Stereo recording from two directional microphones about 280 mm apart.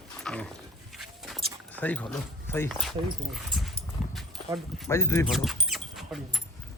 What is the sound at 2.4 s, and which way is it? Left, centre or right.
Speech, centre.